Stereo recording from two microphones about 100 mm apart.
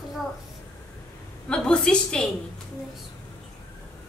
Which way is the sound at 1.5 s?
5° left (ahead or behind).